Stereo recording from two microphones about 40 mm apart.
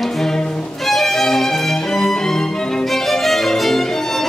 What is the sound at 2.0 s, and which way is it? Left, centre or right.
Music, centre.